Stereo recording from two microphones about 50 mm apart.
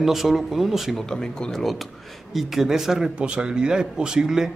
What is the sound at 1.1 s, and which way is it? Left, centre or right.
A man's voice, centre.